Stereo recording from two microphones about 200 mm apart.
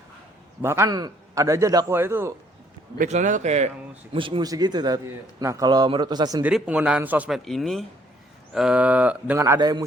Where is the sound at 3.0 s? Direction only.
40° right (ahead or behind); by 6.4 s 20° right (ahead or behind).